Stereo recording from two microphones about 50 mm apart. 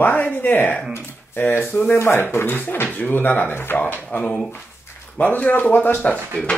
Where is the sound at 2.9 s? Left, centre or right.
Left.